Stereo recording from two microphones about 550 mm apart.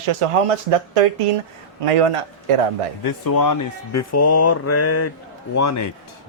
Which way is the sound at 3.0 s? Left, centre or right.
Left.